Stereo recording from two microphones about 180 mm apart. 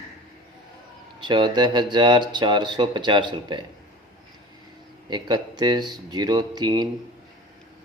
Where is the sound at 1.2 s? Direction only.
25° right (ahead or behind).